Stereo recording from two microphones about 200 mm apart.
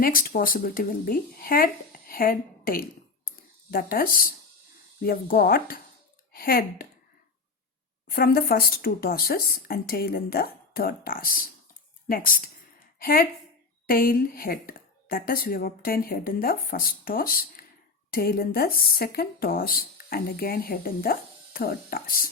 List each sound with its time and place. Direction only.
0.0 s speech: 45° left (ahead or behind)
8.0 s a woman's voice: 50° left (ahead or behind)